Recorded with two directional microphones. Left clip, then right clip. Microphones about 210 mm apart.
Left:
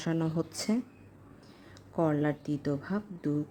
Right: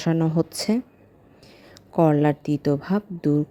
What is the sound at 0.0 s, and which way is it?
A woman's voice, 25° right (ahead or behind).